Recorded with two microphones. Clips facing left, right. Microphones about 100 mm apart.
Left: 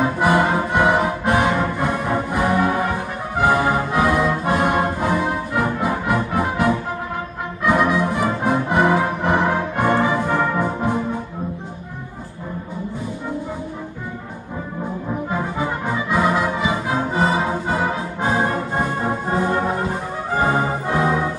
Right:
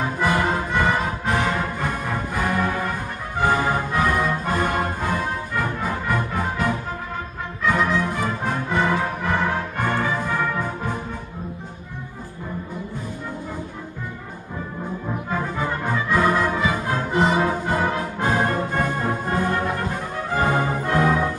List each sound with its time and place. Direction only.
0.0 s music: 10° left (ahead or behind)
15.2 s music: 10° left (ahead or behind)